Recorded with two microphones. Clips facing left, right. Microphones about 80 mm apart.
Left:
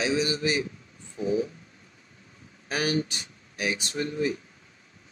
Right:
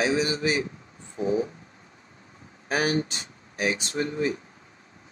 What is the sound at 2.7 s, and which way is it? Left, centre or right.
Speech, right.